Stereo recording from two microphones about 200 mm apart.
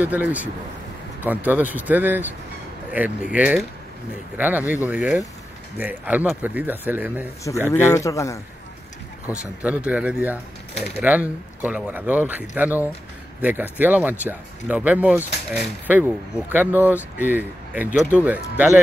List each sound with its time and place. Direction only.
0.0 s speech: 10° right (ahead or behind)
7.7 s a man's voice: 15° left (ahead or behind)
9.8 s speech: 5° right (ahead or behind)